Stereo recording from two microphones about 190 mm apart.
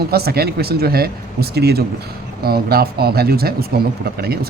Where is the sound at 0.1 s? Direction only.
55° right (ahead or behind).